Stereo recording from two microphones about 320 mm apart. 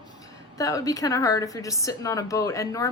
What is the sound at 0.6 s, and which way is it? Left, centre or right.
A woman's voice, centre.